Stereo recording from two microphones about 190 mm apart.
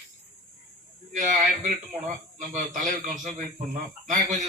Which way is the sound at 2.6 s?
45° right (ahead or behind).